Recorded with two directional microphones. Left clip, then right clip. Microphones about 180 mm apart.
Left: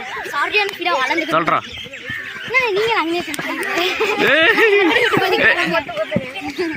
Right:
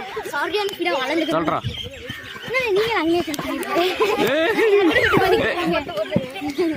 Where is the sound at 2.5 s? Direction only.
60° right (ahead or behind).